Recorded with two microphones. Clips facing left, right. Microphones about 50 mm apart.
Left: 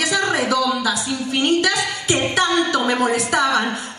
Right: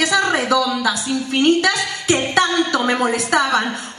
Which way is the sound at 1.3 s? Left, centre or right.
Right.